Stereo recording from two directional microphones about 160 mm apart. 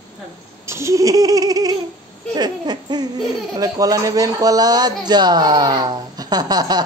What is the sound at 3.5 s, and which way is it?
Speech, 20° right (ahead or behind).